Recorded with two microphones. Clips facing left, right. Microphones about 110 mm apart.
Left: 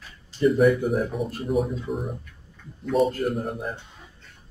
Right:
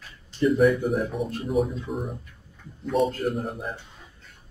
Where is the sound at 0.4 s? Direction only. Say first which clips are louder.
Left 1 dB; centre (ahead or behind).